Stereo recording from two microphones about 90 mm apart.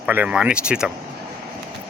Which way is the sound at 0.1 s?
20° right (ahead or behind).